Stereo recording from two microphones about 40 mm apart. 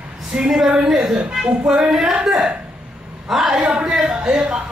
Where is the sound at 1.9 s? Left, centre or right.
Right.